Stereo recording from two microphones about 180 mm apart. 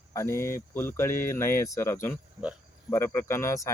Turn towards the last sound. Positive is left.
turn(degrees=15)  # may be behind; listen again after turning